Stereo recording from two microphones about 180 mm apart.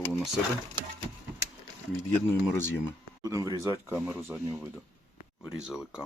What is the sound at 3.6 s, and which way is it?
Speech, 10° right (ahead or behind).